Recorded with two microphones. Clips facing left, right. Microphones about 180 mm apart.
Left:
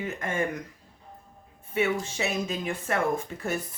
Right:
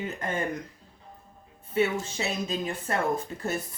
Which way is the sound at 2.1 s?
35° right (ahead or behind).